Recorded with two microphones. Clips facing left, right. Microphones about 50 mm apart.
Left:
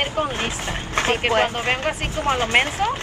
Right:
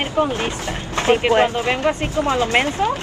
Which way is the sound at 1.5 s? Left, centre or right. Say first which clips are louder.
Right 4 dB; left.